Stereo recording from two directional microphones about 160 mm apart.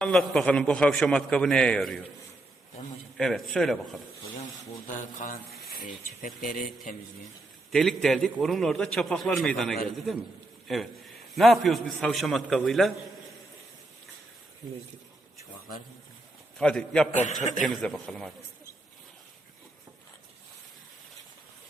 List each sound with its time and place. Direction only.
0.0 s a man's voice: 5° left (ahead or behind)
3.2 s a man's voice: centre (ahead or behind)
5.1 s speech: 55° left (ahead or behind)
5.5 s a sound: centre (ahead or behind)
7.7 s a man's voice: centre (ahead or behind)
16.6 s a man's voice: 5° left (ahead or behind)
17.1 s a man's voice: 50° left (ahead or behind)
17.6 s a man's voice: centre (ahead or behind)